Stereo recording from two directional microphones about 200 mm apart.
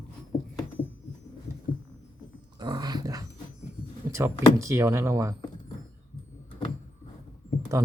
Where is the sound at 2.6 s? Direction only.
20° right (ahead or behind).